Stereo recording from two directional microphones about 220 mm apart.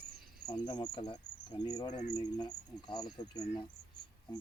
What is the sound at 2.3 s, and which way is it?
Speech, 20° left (ahead or behind).